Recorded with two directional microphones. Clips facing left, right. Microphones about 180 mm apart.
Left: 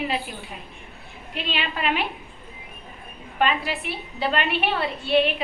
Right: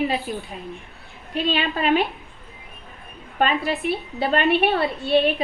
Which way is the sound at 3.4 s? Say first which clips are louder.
Right 2 dB; 35° right (ahead or behind).